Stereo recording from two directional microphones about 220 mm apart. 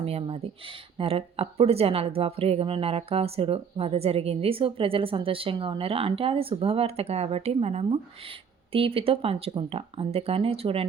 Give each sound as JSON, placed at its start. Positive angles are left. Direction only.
{"t": 0.0, "sound": "a woman's voice", "side_deg": -25}